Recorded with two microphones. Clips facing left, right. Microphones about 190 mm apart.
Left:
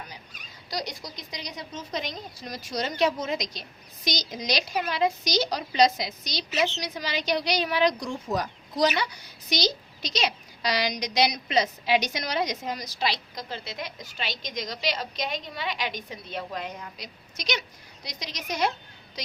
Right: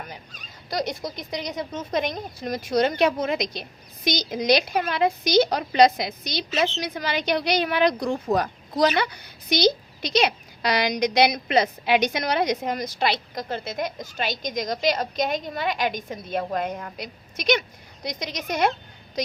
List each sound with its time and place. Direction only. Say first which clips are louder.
0.7 s a woman's voice: right 7 dB; 55° right (ahead or behind)